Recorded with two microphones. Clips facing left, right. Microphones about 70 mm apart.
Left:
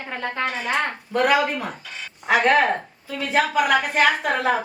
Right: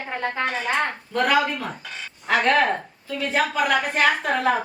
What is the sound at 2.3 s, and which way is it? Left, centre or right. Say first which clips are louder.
A woman's voice: left 2 dB; centre.